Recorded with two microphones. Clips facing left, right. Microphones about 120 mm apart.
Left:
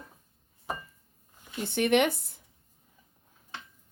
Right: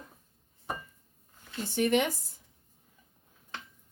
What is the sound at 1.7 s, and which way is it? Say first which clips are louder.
Speech: left 2 dB; 70° left (ahead or behind).